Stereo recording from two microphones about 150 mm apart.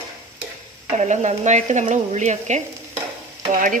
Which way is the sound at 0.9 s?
50° right (ahead or behind).